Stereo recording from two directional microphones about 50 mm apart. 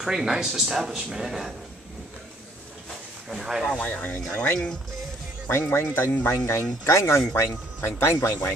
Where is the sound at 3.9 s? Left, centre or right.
Left.